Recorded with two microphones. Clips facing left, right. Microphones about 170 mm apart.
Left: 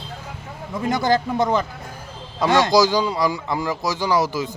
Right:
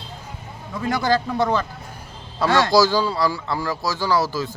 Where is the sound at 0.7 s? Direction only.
20° left (ahead or behind).